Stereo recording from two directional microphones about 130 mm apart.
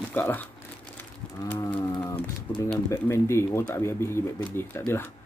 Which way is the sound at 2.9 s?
20° left (ahead or behind).